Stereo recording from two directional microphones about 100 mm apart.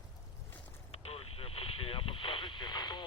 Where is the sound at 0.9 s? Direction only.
80° left.